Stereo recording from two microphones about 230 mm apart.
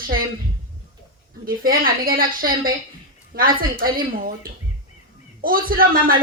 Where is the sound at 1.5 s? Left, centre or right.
Right.